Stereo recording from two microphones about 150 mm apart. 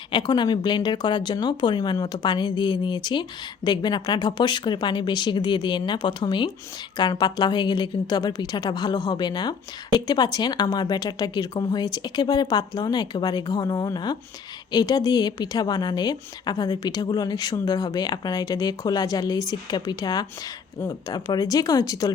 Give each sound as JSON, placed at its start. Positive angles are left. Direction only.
{"t": 0.1, "sound": "a woman's voice", "side_deg": 30}